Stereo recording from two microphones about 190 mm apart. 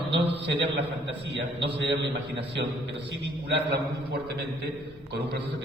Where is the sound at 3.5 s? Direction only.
60° right (ahead or behind).